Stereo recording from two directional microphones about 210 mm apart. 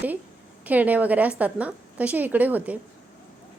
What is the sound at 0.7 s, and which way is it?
Speech, 10° right (ahead or behind).